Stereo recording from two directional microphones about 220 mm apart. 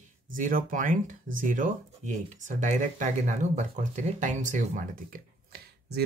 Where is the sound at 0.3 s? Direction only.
40° right (ahead or behind).